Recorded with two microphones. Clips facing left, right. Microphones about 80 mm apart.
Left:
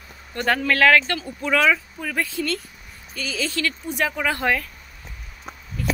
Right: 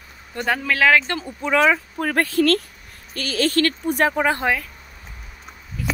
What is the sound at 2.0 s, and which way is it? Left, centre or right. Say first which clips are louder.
Speech: right 7 dB; right.